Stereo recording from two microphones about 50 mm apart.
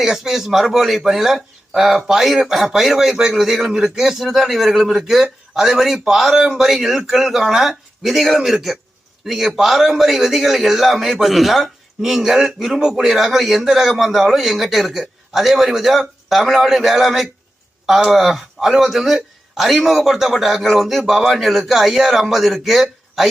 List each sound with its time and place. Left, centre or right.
0.0 s a man's voice: centre